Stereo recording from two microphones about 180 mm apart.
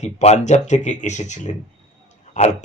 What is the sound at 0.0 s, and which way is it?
Speech, 40° left (ahead or behind).